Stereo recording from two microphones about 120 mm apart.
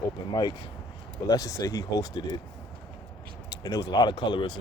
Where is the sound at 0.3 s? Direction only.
35° left (ahead or behind).